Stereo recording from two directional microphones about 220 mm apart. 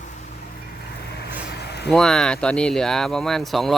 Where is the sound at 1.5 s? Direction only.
50° left (ahead or behind).